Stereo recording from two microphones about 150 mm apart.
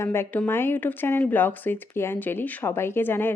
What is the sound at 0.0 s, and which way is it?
Speech, 15° left (ahead or behind).